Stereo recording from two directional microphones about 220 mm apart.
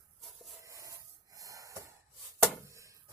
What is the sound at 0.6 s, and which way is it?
Rub, 15° right (ahead or behind).